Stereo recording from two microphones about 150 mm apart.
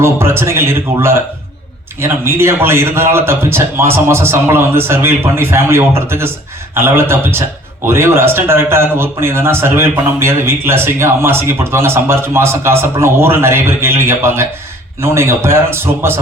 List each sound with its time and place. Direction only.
0.0 s speech: 15° right (ahead or behind)